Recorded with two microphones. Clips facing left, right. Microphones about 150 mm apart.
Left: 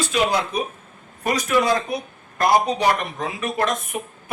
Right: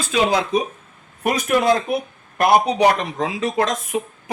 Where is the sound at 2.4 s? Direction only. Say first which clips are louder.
Right 3 dB; 65° right (ahead or behind); by 3.7 s 90° right.